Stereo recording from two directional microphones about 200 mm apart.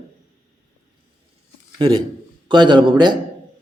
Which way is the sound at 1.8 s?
25° right (ahead or behind).